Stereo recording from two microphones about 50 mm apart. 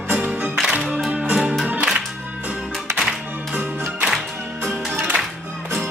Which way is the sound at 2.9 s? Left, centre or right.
Centre.